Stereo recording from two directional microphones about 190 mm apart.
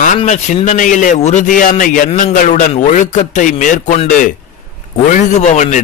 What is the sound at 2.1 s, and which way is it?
Speech, 35° left (ahead or behind).